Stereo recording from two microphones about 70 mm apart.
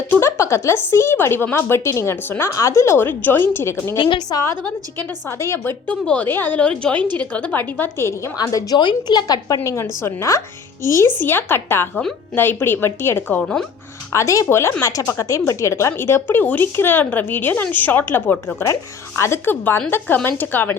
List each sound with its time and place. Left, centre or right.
0.2 s a woman's voice: left
2.2 s speech: left
2.5 s a woman's voice: left
4.3 s speech: left
4.9 s a woman's voice: left
5.8 s speech: centre; by 8.3 s left
8.4 s a woman's voice: left
9.6 s speech: left
11.2 s a woman's voice: left
14.1 s speech: left
18.6 s speech: left
19.5 s speech: left